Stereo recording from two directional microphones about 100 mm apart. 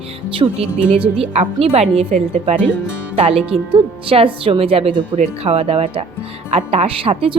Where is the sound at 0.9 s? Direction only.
65° right (ahead or behind); by 2.6 s 90° right.